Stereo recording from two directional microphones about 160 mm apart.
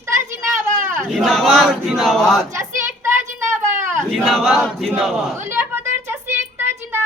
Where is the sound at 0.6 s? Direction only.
15° right (ahead or behind).